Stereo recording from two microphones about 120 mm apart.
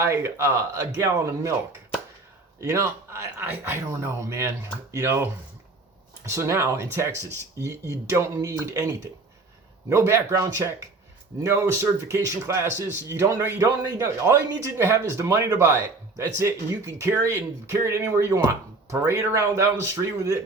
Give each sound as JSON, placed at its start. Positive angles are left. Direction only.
{"t": 0.0, "sound": "a man's voice", "side_deg": -20}
{"t": 2.6, "sound": "a man's voice", "side_deg": -25}